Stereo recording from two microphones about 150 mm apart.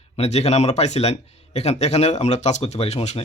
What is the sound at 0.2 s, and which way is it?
Speech, 45° left (ahead or behind).